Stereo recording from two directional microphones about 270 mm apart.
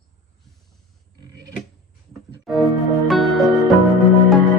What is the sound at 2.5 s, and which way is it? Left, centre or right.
Music, centre.